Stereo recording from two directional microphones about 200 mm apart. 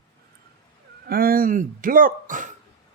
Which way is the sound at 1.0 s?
50° right (ahead or behind).